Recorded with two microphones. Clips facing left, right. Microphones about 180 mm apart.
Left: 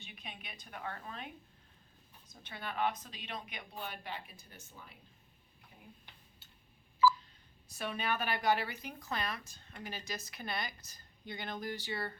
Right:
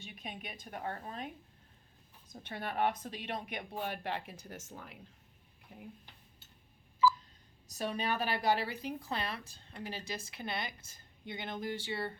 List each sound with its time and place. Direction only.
0.1 s a woman's voice: 45° right (ahead or behind)
2.3 s a woman's voice: 50° right (ahead or behind); by 4.9 s 85° right
5.7 s speech: 70° right (ahead or behind)
7.7 s speech: 40° right (ahead or behind)